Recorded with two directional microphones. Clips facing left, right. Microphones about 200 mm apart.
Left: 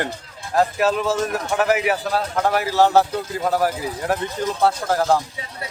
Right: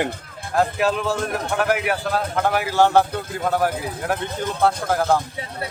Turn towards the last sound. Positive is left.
turn(degrees=0)  # may be behind; listen again after turning